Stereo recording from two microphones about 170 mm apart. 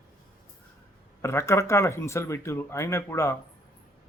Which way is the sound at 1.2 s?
15° left (ahead or behind).